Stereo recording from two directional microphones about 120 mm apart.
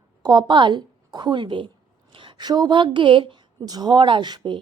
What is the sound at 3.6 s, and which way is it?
A woman's voice, 35° right (ahead or behind).